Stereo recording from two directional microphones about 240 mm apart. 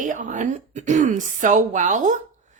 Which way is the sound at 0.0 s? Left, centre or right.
Right.